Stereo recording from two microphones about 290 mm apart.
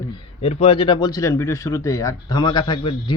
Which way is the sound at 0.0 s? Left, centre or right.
Centre.